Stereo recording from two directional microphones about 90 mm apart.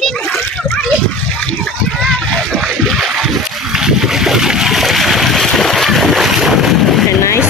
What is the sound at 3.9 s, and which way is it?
Boat, 5° right (ahead or behind).